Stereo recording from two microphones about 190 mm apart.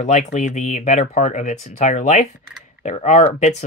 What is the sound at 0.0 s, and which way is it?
Speech, 40° left (ahead or behind).